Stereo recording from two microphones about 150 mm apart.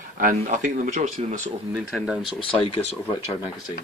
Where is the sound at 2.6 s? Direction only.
40° left (ahead or behind).